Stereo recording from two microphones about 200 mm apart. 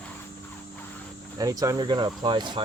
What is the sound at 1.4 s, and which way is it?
Speech, 15° right (ahead or behind).